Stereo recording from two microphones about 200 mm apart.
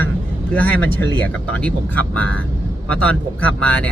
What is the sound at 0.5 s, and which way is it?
Speech, 10° left (ahead or behind).